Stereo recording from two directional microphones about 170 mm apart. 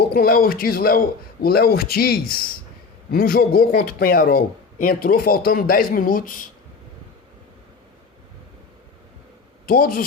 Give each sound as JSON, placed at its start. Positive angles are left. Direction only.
{"t": 0.0, "sound": "a man's voice", "side_deg": 65}
{"t": 9.6, "sound": "a man's voice", "side_deg": 55}